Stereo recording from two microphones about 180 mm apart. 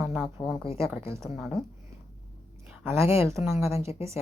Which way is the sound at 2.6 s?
15° right (ahead or behind).